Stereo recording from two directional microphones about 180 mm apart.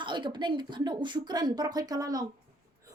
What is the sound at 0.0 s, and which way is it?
A child's voice, 25° right (ahead or behind).